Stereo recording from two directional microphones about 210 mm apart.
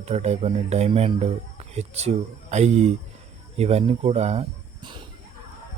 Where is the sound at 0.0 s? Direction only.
30° right (ahead or behind).